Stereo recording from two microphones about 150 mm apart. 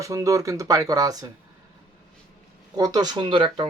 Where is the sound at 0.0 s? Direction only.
20° right (ahead or behind).